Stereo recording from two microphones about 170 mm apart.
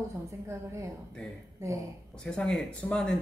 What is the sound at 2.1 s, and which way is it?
Speech, 5° left (ahead or behind).